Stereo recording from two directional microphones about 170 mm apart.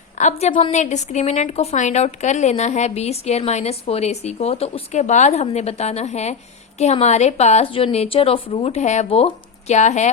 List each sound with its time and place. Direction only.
0.2 s a woman's voice: 40° left (ahead or behind)